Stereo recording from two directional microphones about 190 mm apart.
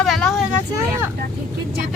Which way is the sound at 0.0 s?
Centre (ahead or behind).